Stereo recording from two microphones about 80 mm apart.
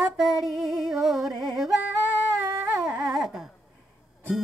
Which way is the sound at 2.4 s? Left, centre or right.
Right.